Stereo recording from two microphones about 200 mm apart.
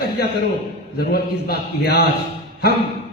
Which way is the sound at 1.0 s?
50° left (ahead or behind).